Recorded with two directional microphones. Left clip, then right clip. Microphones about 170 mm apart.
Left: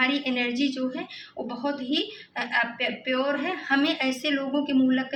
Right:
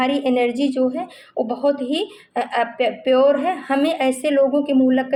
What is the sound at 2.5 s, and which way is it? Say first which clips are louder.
Speech: right 5 dB; 45° right (ahead or behind).